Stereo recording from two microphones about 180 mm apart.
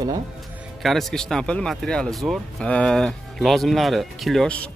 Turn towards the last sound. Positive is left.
turn(degrees=5)  # may be behind; listen again after turning